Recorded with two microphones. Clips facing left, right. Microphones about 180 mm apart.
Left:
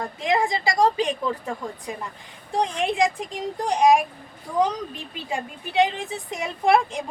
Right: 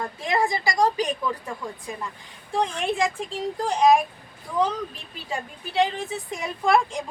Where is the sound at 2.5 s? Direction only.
15° left (ahead or behind).